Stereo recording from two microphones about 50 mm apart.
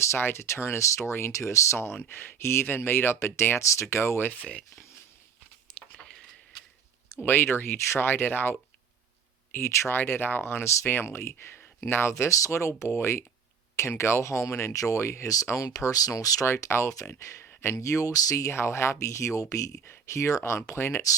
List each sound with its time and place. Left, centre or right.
0.2 s speech: left
0.4 s speech: left
2.0 s speech: left
3.6 s speech: left
5.7 s a sound: centre
7.1 s speech: left
10.0 s speech: left
12.2 s speech: left
12.5 s speech: left
19.9 s speech: left